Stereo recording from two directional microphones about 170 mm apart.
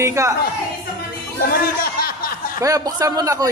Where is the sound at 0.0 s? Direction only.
15° right (ahead or behind).